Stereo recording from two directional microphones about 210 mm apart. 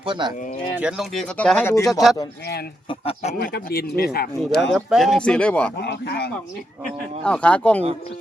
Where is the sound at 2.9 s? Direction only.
25° left (ahead or behind).